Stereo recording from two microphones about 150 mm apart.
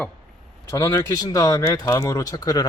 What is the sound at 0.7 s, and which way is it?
Speech, 25° left (ahead or behind).